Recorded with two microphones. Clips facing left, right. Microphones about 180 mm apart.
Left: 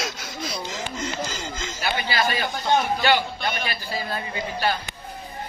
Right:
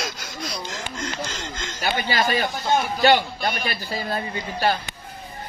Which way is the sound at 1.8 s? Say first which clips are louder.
Right 2 dB; 40° right (ahead or behind).